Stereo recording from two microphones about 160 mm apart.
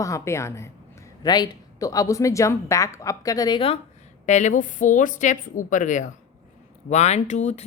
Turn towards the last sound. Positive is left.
turn(degrees=45)  # may be behind; listen again after turning